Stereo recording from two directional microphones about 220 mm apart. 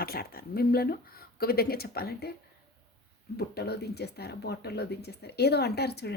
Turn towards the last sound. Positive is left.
turn(degrees=45)  # may be behind; listen again after turning